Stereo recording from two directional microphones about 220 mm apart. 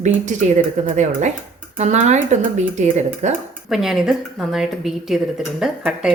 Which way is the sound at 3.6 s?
Centre (ahead or behind).